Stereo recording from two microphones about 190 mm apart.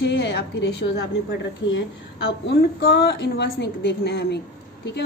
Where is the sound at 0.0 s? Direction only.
65° left (ahead or behind).